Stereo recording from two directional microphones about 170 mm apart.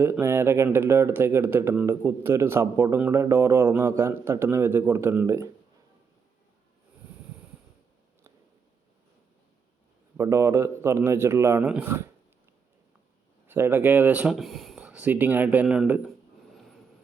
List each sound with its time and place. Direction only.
0.0 s speech: 15° right (ahead or behind)
10.2 s speech: 15° right (ahead or behind)
13.5 s speech: 10° right (ahead or behind)